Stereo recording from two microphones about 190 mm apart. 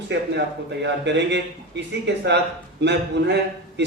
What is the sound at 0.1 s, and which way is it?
Speech, 65° right (ahead or behind).